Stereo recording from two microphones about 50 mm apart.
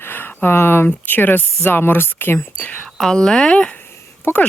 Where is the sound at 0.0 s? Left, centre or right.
Left.